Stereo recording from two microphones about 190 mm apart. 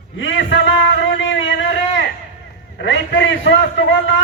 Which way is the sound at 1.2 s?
70° left (ahead or behind).